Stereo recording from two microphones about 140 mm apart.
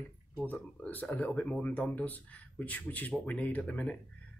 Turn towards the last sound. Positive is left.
turn(degrees=10)  # may be behind; listen again after turning